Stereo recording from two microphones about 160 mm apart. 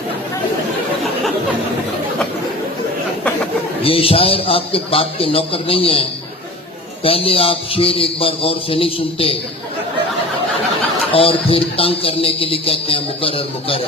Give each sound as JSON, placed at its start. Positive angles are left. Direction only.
{"t": 3.8, "sound": "speech", "side_deg": 35}
{"t": 11.1, "sound": "speech", "side_deg": 35}